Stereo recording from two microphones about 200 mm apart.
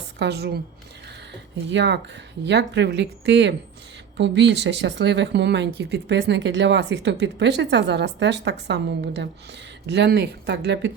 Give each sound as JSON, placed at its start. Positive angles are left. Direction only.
{"t": 0.2, "sound": "speech", "side_deg": -55}